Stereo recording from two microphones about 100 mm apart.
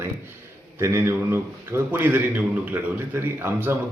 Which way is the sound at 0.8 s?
25° right (ahead or behind).